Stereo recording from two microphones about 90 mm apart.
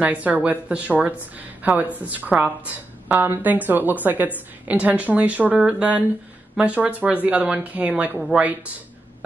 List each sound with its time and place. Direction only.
0.0 s a woman's voice: 15° right (ahead or behind)